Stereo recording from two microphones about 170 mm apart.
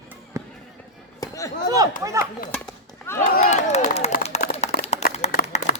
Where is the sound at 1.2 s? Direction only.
20° left (ahead or behind).